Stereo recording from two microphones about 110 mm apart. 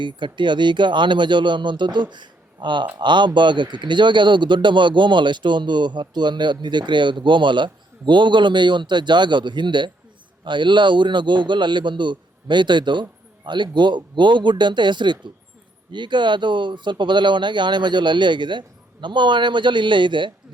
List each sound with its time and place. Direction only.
0.0 s speech: 45° right (ahead or behind)